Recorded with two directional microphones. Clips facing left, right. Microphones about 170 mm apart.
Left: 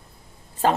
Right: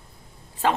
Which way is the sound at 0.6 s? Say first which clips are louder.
Left 2 dB; 40° left (ahead or behind).